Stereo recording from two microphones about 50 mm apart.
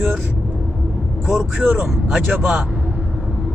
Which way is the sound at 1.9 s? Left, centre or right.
Centre.